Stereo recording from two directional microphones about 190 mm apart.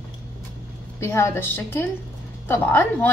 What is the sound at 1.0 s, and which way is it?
A woman's voice, 15° left (ahead or behind).